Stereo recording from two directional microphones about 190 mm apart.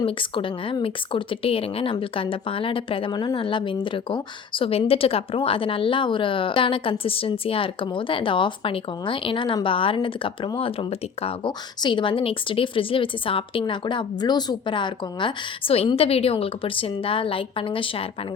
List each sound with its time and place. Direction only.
0.0 s speech: 25° left (ahead or behind)